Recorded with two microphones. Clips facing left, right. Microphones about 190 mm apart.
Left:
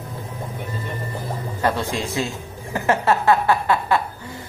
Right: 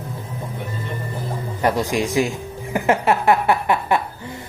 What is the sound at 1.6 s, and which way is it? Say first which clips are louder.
A man's voice: right 3 dB; 15° right (ahead or behind).